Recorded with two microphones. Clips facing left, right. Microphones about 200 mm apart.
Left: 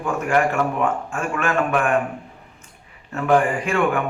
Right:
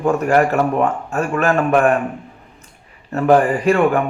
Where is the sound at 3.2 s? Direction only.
35° right (ahead or behind).